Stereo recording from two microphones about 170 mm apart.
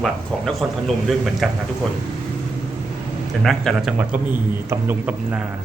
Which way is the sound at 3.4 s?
Centre (ahead or behind).